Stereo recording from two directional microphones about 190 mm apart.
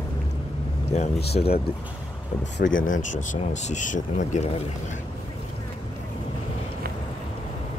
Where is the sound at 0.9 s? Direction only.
35° left (ahead or behind).